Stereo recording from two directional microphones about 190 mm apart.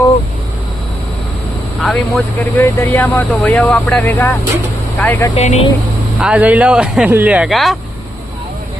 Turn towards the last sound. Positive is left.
turn(degrees=0)  # may be behind; listen again after turning